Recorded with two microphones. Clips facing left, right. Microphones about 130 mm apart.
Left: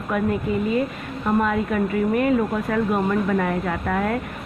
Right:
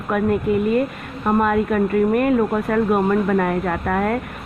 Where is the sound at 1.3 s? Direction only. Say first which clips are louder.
Right 3 dB; 50° right (ahead or behind).